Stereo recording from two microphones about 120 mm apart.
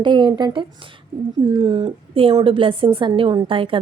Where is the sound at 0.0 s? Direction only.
40° right (ahead or behind).